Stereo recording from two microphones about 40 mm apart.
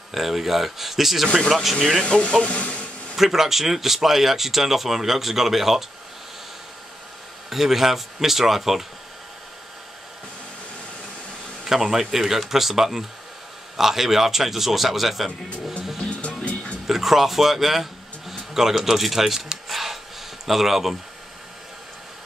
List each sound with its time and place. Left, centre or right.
0.1 s speech: centre
1.8 s speech: centre
2.0 s speech: left
3.2 s speech: centre
7.4 s speech: centre
11.6 s speech: centre
16.8 s speech: centre